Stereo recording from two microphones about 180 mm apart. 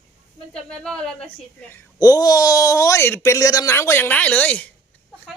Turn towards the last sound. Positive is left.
turn(degrees=10)  # may be behind; listen again after turning